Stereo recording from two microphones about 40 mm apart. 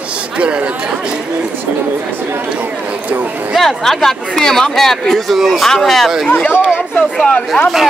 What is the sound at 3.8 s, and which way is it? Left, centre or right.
A man's voice, centre.